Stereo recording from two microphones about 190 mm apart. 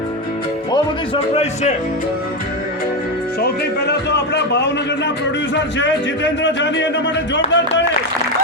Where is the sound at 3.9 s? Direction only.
65° left (ahead or behind).